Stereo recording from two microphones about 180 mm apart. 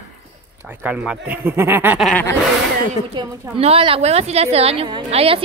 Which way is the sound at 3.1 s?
25° right (ahead or behind).